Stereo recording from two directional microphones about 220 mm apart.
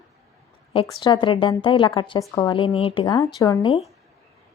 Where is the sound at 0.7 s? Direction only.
25° left (ahead or behind).